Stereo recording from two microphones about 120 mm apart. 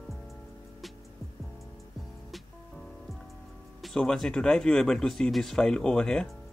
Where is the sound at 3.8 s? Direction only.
5° left (ahead or behind).